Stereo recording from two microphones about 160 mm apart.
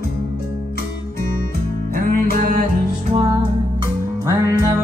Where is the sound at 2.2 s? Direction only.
65° right (ahead or behind).